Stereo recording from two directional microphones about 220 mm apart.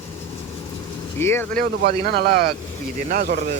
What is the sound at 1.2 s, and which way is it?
Speech, 10° left (ahead or behind).